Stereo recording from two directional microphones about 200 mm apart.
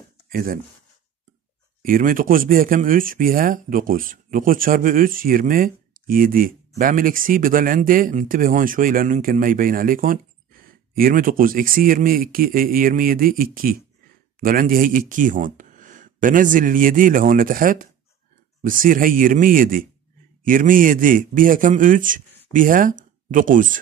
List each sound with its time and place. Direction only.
0.3 s speech: 45° right (ahead or behind)
1.8 s speech: 45° right (ahead or behind)